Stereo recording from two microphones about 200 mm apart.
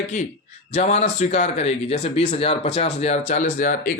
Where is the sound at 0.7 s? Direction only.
35° left (ahead or behind).